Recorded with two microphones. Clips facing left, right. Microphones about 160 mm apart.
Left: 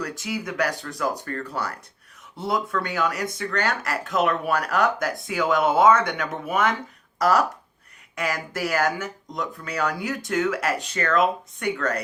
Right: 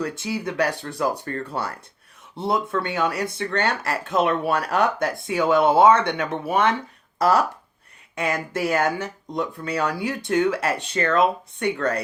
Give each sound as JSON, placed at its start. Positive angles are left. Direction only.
{"t": 0.0, "sound": "speech", "side_deg": -25}